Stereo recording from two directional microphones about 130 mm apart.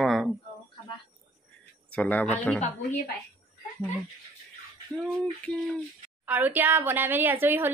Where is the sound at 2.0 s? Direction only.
10° left (ahead or behind).